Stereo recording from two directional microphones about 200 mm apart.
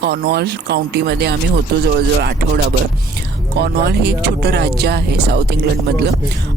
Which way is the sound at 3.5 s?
55° right (ahead or behind).